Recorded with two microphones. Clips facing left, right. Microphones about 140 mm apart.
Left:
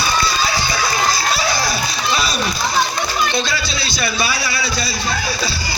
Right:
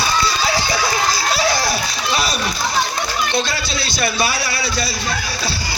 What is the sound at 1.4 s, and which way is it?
Music, 75° right (ahead or behind).